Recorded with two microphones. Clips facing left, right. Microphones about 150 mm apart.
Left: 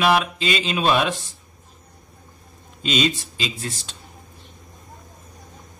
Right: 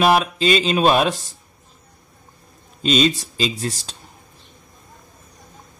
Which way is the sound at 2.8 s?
35° right (ahead or behind).